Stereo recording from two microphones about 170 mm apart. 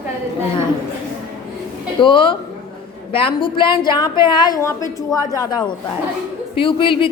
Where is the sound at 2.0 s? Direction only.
30° left (ahead or behind).